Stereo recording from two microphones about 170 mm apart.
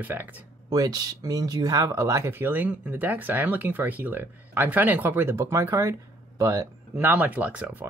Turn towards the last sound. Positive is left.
turn(degrees=-10)  # may be behind; listen again after turning